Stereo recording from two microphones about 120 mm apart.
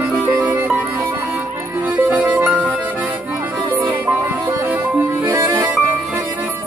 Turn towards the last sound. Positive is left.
turn(degrees=-20)  # may be behind; listen again after turning